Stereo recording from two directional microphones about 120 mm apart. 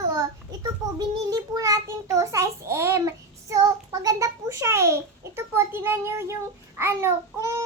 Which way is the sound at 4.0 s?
25° right (ahead or behind).